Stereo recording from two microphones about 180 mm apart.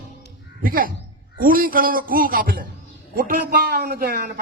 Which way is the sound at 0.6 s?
50° right (ahead or behind).